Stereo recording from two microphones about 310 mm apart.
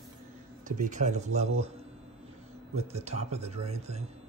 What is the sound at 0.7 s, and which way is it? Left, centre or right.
Speech, right.